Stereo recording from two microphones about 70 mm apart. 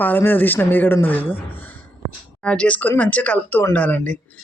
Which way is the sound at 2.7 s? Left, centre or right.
Left.